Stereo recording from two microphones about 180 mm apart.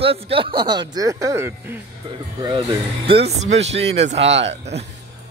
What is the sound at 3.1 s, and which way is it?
Speech, 35° right (ahead or behind).